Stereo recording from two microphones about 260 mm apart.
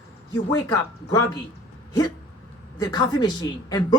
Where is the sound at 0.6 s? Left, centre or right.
Centre.